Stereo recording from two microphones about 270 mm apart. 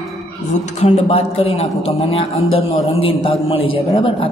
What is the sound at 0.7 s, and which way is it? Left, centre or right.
A woman's voice, left.